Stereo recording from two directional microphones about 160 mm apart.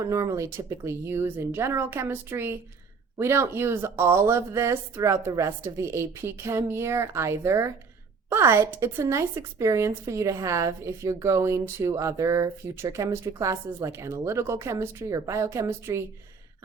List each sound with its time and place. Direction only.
0.0 s a woman's voice: 20° right (ahead or behind)